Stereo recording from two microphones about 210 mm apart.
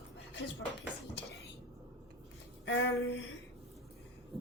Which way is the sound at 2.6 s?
55° left (ahead or behind).